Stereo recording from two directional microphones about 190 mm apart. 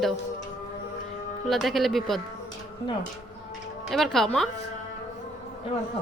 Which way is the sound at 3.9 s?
Centre (ahead or behind).